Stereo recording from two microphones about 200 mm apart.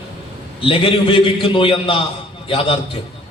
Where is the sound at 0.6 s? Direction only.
25° left (ahead or behind).